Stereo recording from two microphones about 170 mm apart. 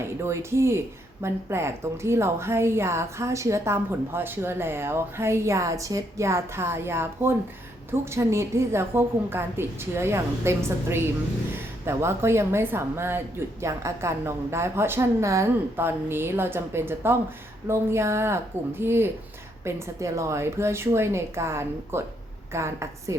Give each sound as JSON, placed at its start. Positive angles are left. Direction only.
{"t": 0.0, "sound": "a woman's voice", "side_deg": -15}